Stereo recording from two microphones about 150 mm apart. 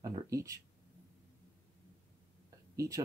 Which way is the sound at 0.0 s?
20° right (ahead or behind).